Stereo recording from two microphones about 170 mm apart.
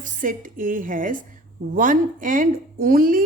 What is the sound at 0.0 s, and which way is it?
A woman's voice, 50° right (ahead or behind).